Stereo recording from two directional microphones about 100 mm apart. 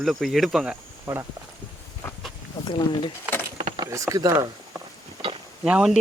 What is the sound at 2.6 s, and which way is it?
Speech, 55° left (ahead or behind).